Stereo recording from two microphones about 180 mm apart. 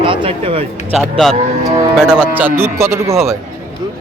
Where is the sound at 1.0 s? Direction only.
Centre (ahead or behind); by 3.3 s 15° right (ahead or behind).